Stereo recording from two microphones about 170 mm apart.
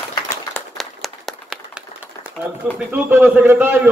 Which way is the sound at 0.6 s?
Centre (ahead or behind).